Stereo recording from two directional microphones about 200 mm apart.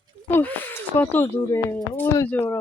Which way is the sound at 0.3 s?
10° left (ahead or behind).